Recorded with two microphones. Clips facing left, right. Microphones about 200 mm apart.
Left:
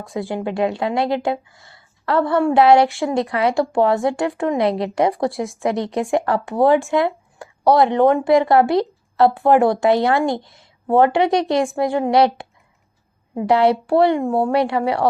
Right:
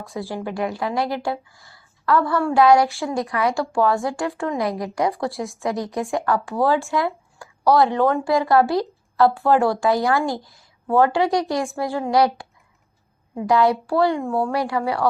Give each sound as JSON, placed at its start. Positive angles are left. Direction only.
{"t": 0.1, "sound": "speech", "side_deg": 20}